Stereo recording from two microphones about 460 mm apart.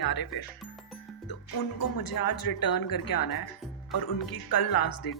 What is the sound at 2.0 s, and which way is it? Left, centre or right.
Speech, left.